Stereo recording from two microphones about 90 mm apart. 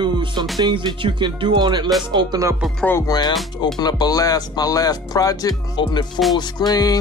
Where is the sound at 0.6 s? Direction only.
55° right (ahead or behind).